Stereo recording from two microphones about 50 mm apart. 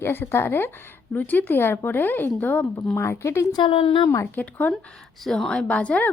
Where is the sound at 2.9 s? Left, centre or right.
Left.